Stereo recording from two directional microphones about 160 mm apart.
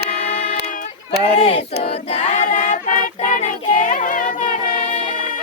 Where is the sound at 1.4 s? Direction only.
35° left (ahead or behind).